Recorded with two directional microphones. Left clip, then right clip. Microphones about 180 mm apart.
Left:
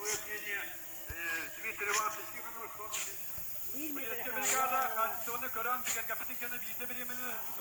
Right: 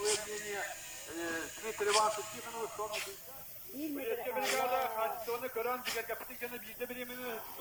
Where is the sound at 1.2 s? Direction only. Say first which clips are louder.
Left 2 dB; 70° right (ahead or behind).